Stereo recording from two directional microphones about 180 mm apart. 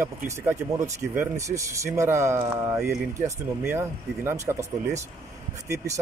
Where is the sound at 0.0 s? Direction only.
15° right (ahead or behind).